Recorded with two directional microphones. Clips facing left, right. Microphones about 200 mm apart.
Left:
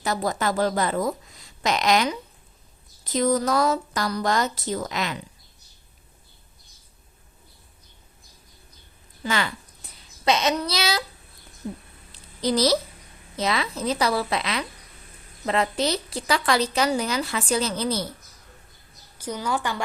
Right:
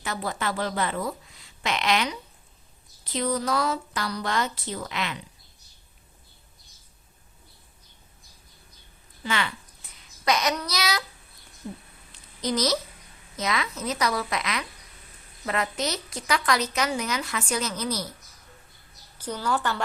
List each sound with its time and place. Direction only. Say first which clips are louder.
0.0 s a woman's voice: left 5 dB; 40° left (ahead or behind)
9.2 s a woman's voice: left 3 dB; 40° left (ahead or behind)
10.0 s a child's voice: left 3 dB; 25° left (ahead or behind)
12.1 s a sound: left 4 dB; 35° left (ahead or behind)
13.3 s a woman's voice: left 3 dB; 30° left (ahead or behind)
19.2 s a woman's voice: even; 10° left (ahead or behind)